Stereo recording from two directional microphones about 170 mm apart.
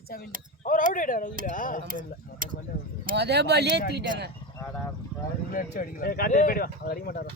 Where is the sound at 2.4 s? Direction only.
55° right (ahead or behind).